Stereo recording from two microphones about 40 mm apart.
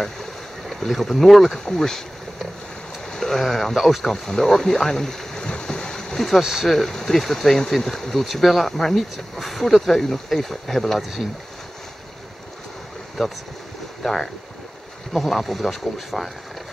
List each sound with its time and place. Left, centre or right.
0.0 s boat: centre
0.8 s speech: centre
3.1 s speech: centre
4.1 s speech: centre
5.4 s boat: centre
6.4 s speech: centre
6.7 s speech: centre
13.2 s speech: centre